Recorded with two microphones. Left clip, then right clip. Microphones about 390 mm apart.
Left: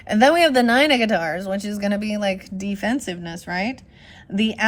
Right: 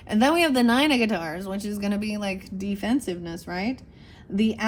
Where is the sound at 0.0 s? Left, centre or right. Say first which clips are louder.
Left 6 dB; left.